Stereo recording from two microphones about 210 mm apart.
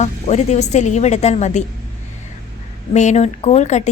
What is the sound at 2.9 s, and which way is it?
A woman's voice, 35° left (ahead or behind).